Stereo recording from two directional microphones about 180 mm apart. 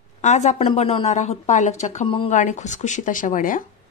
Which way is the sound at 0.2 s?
40° left (ahead or behind).